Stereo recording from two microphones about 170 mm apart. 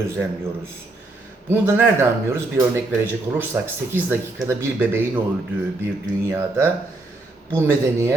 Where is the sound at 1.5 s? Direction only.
10° right (ahead or behind).